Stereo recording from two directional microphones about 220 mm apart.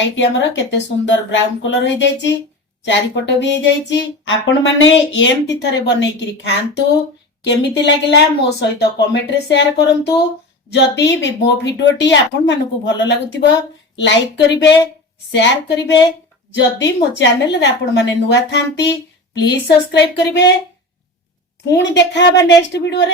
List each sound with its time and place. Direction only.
0.0 s a woman's voice: 55° left (ahead or behind)
21.8 s a woman's voice: 50° left (ahead or behind)